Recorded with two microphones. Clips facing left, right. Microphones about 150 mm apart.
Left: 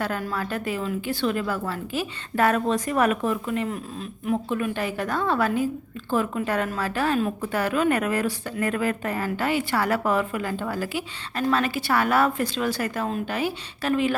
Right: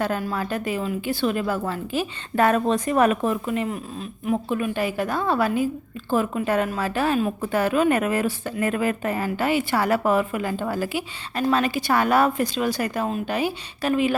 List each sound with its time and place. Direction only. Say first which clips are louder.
0.0 s a woman's voice: right 3 dB; 20° right (ahead or behind)